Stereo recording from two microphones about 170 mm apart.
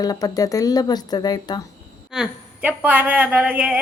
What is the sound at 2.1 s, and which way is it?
A woman's voice, 5° right (ahead or behind).